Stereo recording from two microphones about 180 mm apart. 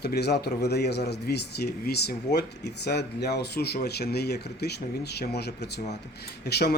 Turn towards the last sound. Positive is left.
turn(degrees=65)  # may be behind; listen again after turning